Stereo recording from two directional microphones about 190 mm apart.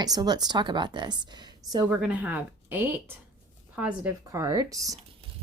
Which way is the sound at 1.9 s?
5° right (ahead or behind).